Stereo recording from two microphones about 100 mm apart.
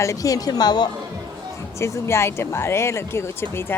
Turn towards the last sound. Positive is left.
turn(degrees=25)  # may be behind; listen again after turning